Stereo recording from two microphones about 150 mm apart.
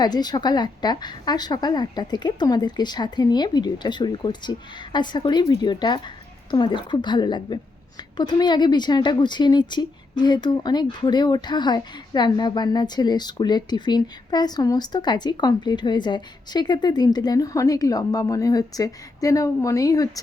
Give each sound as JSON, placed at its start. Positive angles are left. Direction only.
{"t": 0.0, "sound": "a woman's voice", "side_deg": 25}